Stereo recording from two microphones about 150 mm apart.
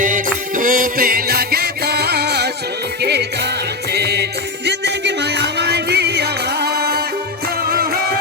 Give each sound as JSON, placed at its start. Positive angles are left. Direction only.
{"t": 0.0, "sound": "music", "side_deg": -60}